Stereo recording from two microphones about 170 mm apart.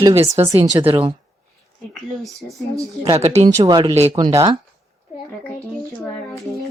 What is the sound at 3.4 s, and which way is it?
Speech, 25° right (ahead or behind).